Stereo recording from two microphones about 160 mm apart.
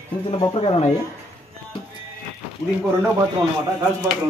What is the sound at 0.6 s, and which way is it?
Speech, 40° left (ahead or behind).